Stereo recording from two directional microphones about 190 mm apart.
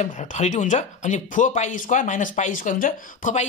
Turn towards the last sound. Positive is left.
turn(degrees=40)  # may be behind; listen again after turning